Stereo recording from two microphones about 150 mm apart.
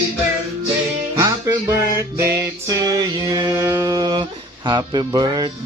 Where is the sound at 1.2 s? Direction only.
20° right (ahead or behind).